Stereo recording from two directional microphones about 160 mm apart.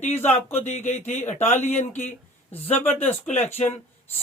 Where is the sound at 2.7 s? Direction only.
10° left (ahead or behind).